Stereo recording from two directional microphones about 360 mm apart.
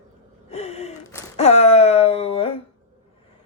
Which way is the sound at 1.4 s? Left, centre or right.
Centre.